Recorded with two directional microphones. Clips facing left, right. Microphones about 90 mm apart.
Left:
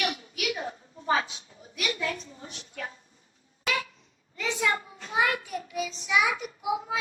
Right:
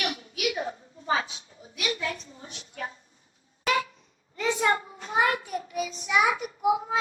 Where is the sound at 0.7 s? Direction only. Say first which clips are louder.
Left 1 dB; 30° right (ahead or behind).